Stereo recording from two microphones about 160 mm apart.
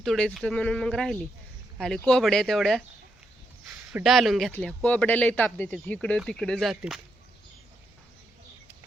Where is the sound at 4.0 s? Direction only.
Centre (ahead or behind).